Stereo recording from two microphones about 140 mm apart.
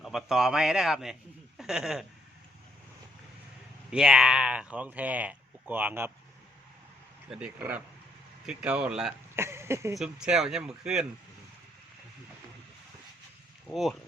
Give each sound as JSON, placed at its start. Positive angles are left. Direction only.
{"t": 0.0, "sound": "speech", "side_deg": 0}
{"t": 3.9, "sound": "speech", "side_deg": -5}
{"t": 7.3, "sound": "speech", "side_deg": -10}
{"t": 9.3, "sound": "a sound", "side_deg": -20}
{"t": 10.0, "sound": "speech", "side_deg": -5}